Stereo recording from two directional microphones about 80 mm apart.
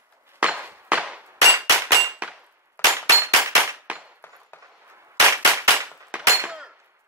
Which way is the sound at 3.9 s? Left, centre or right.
Centre.